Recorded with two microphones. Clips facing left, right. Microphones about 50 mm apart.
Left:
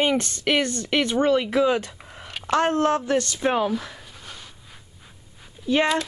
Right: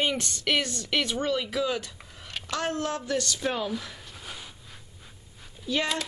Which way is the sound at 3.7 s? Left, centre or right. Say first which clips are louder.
Left 6 dB; centre.